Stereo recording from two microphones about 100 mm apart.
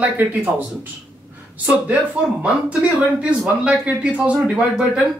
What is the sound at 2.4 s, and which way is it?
A man's voice, 10° right (ahead or behind).